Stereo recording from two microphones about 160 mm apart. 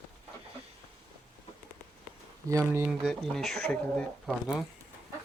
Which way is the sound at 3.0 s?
Centre (ahead or behind).